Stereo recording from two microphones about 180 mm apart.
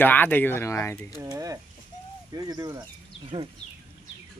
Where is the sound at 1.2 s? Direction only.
20° right (ahead or behind).